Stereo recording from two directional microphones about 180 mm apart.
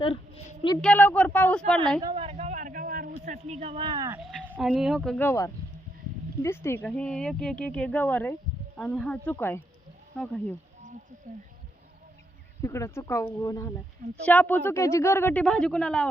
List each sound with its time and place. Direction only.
0.8 s speech: 10° left (ahead or behind)
2.0 s speech: 20° right (ahead or behind)
2.2 s a sound: 40° right (ahead or behind); by 4.2 s 20° right (ahead or behind)
4.4 s speech: 5° right (ahead or behind)
5.1 s speech: 15° left (ahead or behind)
12.6 s speech: 15° left (ahead or behind)